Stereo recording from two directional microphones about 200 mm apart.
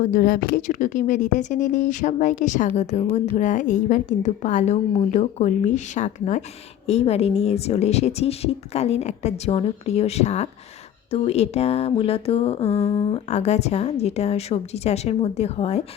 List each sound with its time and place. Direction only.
0.0 s speech: 45° left (ahead or behind)